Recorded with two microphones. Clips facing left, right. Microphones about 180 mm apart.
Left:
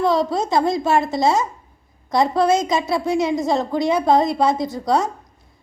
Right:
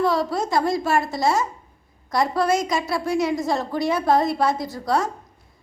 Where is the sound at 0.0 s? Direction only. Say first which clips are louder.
Left 3 dB; 20° left (ahead or behind).